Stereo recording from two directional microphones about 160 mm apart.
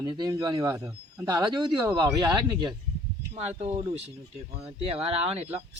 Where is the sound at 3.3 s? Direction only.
40° right (ahead or behind).